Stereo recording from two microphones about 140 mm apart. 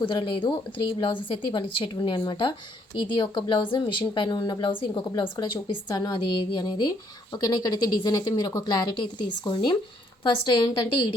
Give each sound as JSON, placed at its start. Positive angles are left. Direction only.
{"t": 0.0, "sound": "speech", "side_deg": 35}